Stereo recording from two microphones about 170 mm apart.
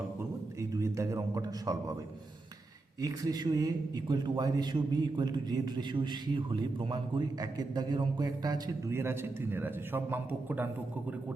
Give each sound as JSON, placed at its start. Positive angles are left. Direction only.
{"t": 0.6, "sound": "a man's voice", "side_deg": -15}
{"t": 3.0, "sound": "a man's voice", "side_deg": -20}